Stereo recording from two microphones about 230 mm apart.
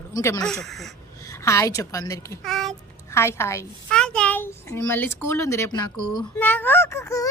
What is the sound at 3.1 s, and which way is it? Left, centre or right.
A child's voice, centre.